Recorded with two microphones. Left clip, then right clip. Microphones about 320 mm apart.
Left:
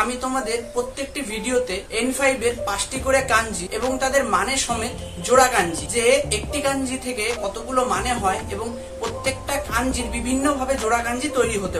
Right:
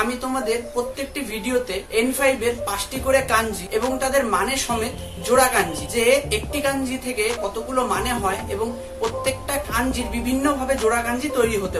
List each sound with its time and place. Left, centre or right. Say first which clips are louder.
0.2 s speech: even; centre
1.7 s speech: right 2 dB; centre
7.2 s speech: right 2 dB; centre